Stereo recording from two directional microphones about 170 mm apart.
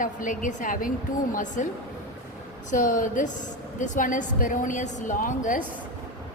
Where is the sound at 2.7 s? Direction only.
50° left (ahead or behind).